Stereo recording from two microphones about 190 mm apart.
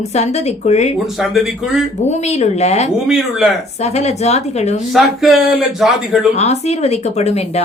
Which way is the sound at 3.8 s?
35° left (ahead or behind).